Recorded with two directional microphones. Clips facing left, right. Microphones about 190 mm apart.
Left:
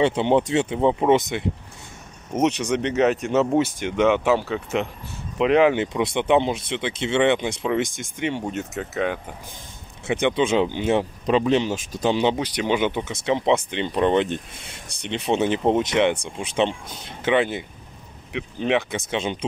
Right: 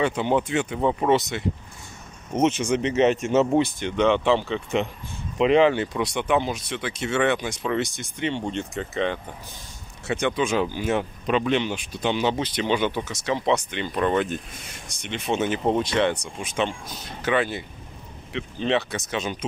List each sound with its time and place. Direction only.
0.0 s speech: 25° left (ahead or behind)
2.3 s speech: centre (ahead or behind)
5.7 s speech: 20° left (ahead or behind)
7.8 s speech: 90° left
8.2 s speech: 10° left (ahead or behind)
10.2 s speech: 25° left (ahead or behind)
12.4 s speech: 15° left (ahead or behind)
19.0 s speech: 25° left (ahead or behind)